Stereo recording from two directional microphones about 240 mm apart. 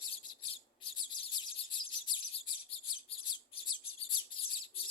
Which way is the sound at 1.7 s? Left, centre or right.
Centre.